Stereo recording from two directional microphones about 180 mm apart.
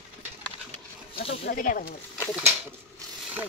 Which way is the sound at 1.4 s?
50° left (ahead or behind).